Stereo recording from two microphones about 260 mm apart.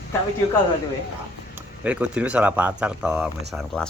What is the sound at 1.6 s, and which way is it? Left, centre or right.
Speech, centre.